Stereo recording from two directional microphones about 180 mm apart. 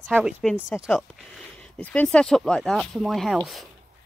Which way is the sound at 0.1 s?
Centre (ahead or behind).